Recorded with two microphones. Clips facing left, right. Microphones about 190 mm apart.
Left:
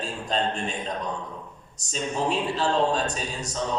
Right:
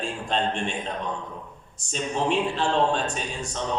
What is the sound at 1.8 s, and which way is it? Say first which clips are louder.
A man's voice: right 1 dB; 40° left (ahead or behind).